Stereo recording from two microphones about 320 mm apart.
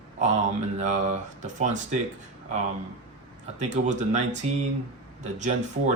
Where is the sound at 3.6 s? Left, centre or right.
Right.